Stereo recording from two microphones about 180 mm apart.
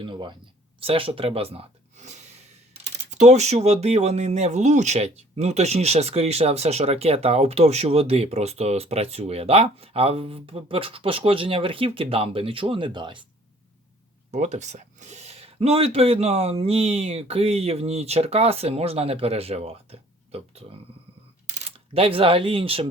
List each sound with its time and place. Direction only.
0.0 s speech: 25° right (ahead or behind)
14.3 s speech: 40° right (ahead or behind)